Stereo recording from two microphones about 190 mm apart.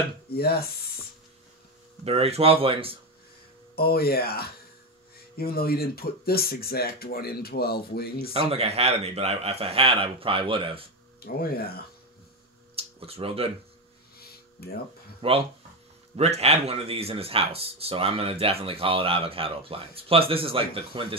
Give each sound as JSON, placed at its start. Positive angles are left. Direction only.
{"t": 0.3, "sound": "chopping", "side_deg": 55}
{"t": 2.0, "sound": "speech", "side_deg": -30}
{"t": 3.7, "sound": "speech", "side_deg": 55}
{"t": 8.3, "sound": "a man's voice", "side_deg": -30}
{"t": 11.1, "sound": "speech", "side_deg": 55}
{"t": 12.7, "sound": "a sound", "side_deg": -30}
{"t": 14.6, "sound": "chopping", "side_deg": 55}
{"t": 15.2, "sound": "speech", "side_deg": -30}